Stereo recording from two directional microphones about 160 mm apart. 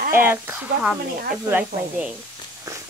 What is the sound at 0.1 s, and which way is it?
Speech, 15° right (ahead or behind).